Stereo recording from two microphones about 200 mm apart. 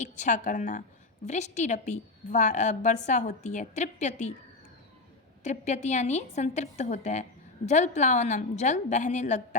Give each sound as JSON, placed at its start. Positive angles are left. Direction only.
{"t": 0.0, "sound": "a woman's voice", "side_deg": 40}
{"t": 5.4, "sound": "a woman's voice", "side_deg": 35}